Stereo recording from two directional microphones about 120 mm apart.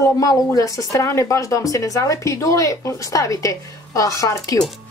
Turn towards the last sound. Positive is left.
turn(degrees=30)  # may be behind; listen again after turning